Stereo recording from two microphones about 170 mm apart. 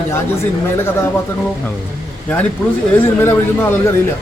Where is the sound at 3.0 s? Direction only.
10° left (ahead or behind).